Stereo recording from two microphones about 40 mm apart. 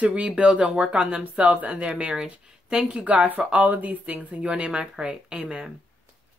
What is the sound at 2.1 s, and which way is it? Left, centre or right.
Speech, centre.